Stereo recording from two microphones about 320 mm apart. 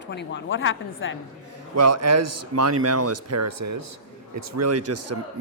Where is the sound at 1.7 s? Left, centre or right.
Right.